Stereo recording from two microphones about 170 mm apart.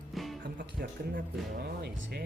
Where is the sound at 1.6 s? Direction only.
70° right (ahead or behind).